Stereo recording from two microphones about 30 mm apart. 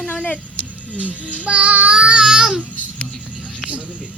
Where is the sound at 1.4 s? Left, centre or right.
Right.